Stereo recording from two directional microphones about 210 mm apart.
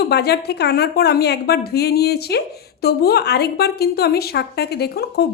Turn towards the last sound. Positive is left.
turn(degrees=50)  # may be behind; listen again after turning